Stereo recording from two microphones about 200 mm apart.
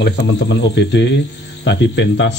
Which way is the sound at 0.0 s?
60° left (ahead or behind).